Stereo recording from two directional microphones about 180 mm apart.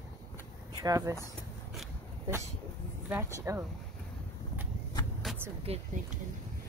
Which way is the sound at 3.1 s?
15° right (ahead or behind).